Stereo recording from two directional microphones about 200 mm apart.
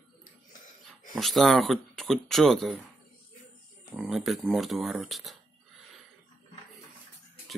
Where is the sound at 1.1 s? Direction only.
Centre (ahead or behind).